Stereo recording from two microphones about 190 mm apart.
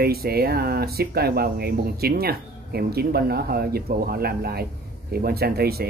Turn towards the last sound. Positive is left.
turn(degrees=-55)  # may be behind; listen again after turning